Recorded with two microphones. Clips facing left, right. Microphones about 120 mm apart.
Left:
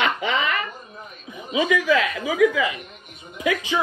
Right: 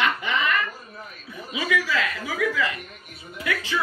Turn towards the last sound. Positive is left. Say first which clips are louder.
# left 5 dB
turn(degrees=20)  # may be behind; listen again after turning